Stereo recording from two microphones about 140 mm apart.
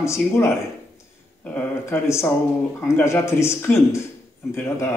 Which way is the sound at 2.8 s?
20° left (ahead or behind).